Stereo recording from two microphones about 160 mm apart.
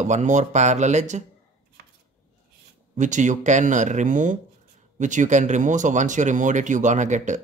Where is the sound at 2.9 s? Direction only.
50° right (ahead or behind).